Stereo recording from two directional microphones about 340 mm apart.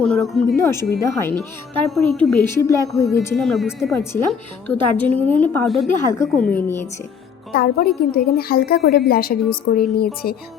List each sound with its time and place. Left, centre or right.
0.0 s a woman's voice: centre
7.5 s a woman's voice: left